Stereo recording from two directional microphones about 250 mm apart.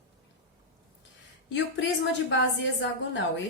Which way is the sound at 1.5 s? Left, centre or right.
Left.